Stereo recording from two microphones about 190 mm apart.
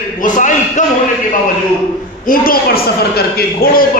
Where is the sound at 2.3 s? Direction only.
50° left (ahead or behind).